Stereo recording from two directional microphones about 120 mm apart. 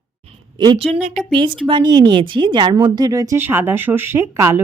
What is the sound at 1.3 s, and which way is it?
A woman's voice, 45° right (ahead or behind).